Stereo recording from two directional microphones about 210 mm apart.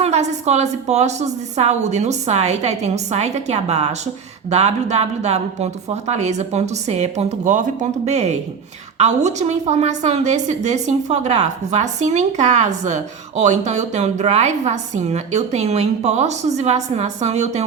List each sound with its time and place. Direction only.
0.0 s a woman's voice: 30° right (ahead or behind)